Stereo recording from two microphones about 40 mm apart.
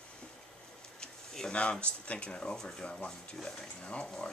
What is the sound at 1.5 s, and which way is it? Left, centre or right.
Speech, left.